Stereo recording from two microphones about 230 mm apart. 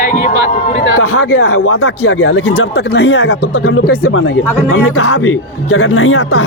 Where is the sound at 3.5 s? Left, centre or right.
Left.